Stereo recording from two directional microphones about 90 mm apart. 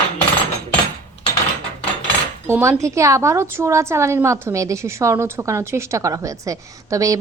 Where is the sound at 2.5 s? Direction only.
30° right (ahead or behind).